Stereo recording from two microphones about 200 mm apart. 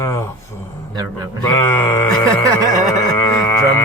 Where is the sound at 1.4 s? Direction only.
10° left (ahead or behind).